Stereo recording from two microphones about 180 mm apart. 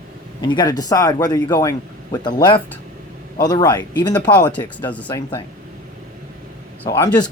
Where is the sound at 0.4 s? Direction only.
25° left (ahead or behind).